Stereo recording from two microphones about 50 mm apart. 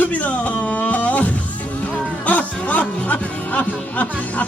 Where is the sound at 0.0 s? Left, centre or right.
Left.